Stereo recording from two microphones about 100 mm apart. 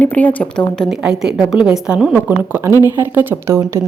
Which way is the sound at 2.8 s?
20° right (ahead or behind).